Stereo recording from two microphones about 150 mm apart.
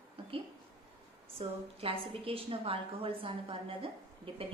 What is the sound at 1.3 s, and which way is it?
Speech, 40° right (ahead or behind).